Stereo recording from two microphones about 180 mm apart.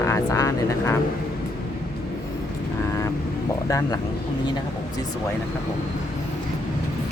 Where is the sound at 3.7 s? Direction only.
20° left (ahead or behind).